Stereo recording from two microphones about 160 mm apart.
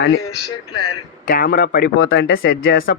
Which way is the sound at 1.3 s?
65° left (ahead or behind).